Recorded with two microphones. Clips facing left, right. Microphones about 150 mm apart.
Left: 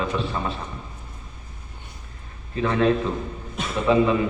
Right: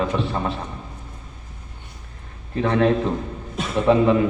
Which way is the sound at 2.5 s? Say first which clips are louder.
Right 2 dB; 60° right (ahead or behind).